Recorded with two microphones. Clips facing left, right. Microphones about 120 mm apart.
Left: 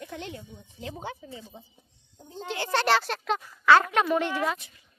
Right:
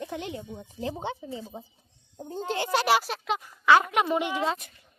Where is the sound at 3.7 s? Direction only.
15° right (ahead or behind).